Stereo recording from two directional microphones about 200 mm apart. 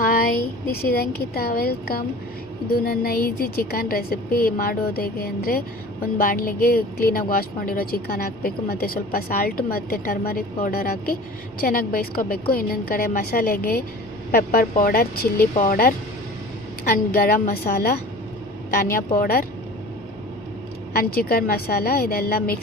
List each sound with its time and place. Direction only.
0.0 s speech: 45° left (ahead or behind)
20.9 s speech: 50° left (ahead or behind)